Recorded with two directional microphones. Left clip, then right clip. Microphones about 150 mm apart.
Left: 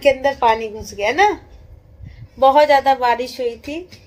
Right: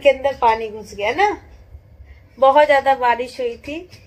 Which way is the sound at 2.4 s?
10° left (ahead or behind).